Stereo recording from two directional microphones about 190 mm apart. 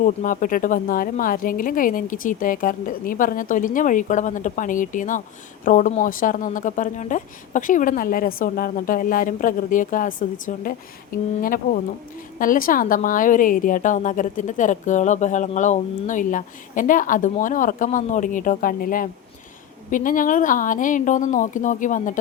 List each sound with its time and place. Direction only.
0.0 s a woman's voice: 45° left (ahead or behind)